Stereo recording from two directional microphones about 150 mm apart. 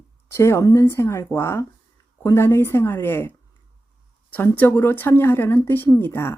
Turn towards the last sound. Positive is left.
turn(degrees=15)  # may be behind; listen again after turning